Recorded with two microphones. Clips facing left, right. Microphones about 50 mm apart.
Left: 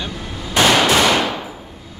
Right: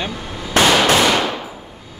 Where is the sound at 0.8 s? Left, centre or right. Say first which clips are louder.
Even; centre.